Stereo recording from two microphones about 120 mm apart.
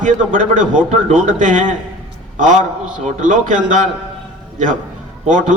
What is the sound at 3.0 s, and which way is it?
Speech, 90° right.